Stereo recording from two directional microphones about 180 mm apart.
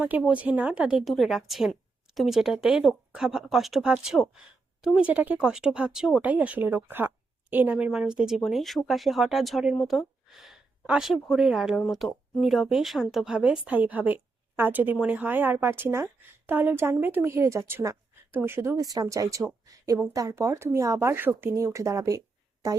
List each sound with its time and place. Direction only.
0.0 s a woman's voice: 10° right (ahead or behind)